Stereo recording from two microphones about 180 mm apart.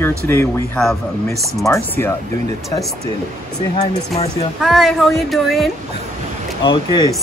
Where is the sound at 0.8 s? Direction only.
Centre (ahead or behind).